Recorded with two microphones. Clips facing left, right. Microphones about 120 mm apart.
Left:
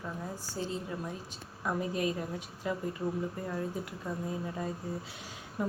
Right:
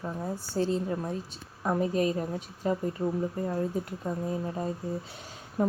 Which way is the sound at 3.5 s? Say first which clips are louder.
Right 5 dB; 35° right (ahead or behind).